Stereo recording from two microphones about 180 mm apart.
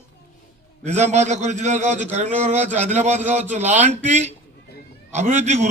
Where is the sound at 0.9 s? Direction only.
40° right (ahead or behind).